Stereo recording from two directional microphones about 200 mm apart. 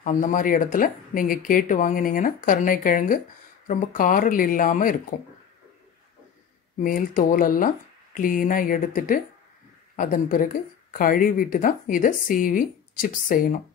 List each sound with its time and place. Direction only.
0.0 s speech: 40° left (ahead or behind)
6.8 s speech: 45° left (ahead or behind)